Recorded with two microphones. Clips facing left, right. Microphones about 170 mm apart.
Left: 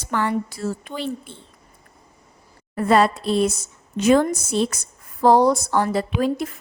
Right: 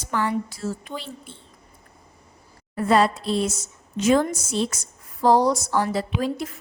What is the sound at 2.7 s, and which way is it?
A woman's voice, 60° left (ahead or behind).